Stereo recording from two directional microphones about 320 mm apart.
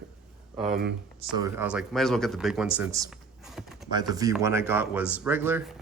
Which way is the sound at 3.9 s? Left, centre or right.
Centre.